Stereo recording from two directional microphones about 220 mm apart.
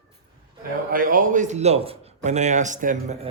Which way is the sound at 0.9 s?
40° right (ahead or behind).